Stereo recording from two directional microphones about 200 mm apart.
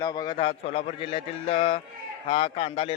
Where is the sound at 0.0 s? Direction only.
20° left (ahead or behind).